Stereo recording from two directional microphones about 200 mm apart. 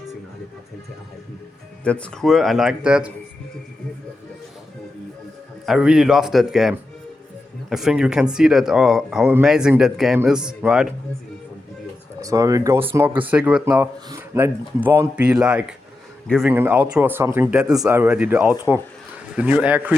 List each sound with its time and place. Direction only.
1.8 s speech: 5° left (ahead or behind)
5.6 s speech: centre (ahead or behind)
12.2 s speech: 15° right (ahead or behind); by 16.5 s centre (ahead or behind)
16.5 s speech: 10° right (ahead or behind)